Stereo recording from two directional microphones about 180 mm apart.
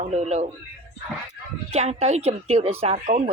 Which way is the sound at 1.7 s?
35° right (ahead or behind).